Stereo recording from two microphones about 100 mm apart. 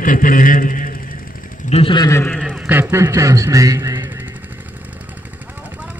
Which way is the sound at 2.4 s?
10° right (ahead or behind).